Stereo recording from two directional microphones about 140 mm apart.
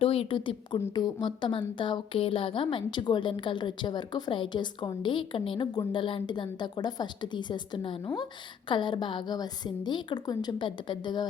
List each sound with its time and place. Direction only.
0.0 s a woman's voice: 40° left (ahead or behind)